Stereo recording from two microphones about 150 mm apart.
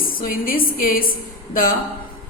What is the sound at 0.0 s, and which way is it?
A woman's voice, 70° left (ahead or behind).